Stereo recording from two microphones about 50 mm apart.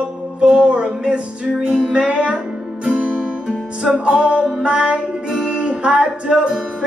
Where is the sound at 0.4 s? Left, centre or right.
Centre.